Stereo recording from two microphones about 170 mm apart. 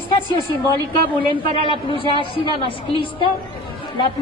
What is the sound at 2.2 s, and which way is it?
A woman's voice, 30° left (ahead or behind).